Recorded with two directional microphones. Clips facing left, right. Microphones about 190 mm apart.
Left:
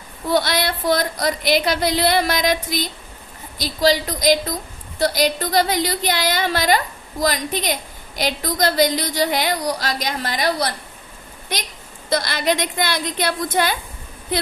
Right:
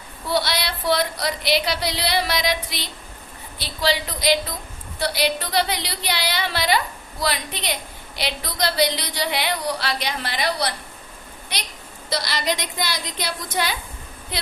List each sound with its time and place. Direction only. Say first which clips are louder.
0.3 s a woman's voice: left 4 dB; 50° left (ahead or behind)
12.0 s a woman's voice: left 5 dB; 50° left (ahead or behind)